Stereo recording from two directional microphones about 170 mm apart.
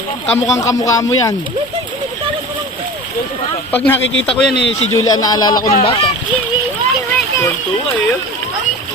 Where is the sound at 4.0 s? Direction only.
90° left.